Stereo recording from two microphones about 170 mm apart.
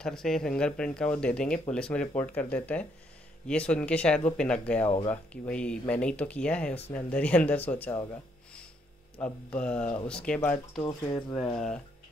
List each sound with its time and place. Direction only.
0.0 s speech: 5° left (ahead or behind)
4.8 s speech: 35° left (ahead or behind)
5.1 s speech: 10° left (ahead or behind)
9.2 s speech: 5° left (ahead or behind)
10.9 s speech: 25° left (ahead or behind)